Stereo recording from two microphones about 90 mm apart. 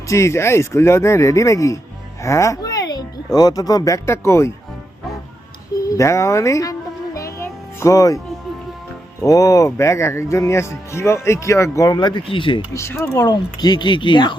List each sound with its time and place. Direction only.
0.1 s speech: 35° left (ahead or behind)
2.2 s a sound: 35° left (ahead or behind)
3.3 s speech: 45° left (ahead or behind)
5.9 s music: 35° left (ahead or behind)
9.2 s speech: 40° left (ahead or behind)
11.9 s speech: 55° left (ahead or behind)
12.7 s speech: 30° left (ahead or behind)
13.1 s speech: 50° left (ahead or behind)